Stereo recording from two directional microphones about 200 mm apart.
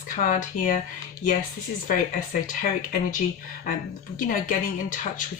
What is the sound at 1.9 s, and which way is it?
Speech, 40° left (ahead or behind).